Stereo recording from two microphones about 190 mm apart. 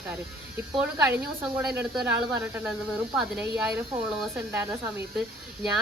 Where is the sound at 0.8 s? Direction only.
5° right (ahead or behind).